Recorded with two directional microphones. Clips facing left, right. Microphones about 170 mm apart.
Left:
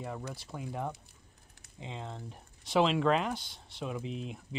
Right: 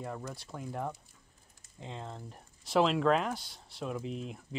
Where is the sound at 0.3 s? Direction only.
Centre (ahead or behind).